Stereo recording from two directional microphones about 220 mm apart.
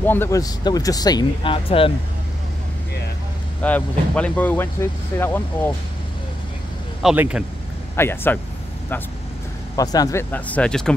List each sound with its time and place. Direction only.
0.0 s speech: 10° left (ahead or behind)
3.6 s speech: 5° left (ahead or behind)
7.0 s speech: 5° right (ahead or behind)
7.9 s speech: 10° left (ahead or behind)
9.8 s speech: 15° left (ahead or behind)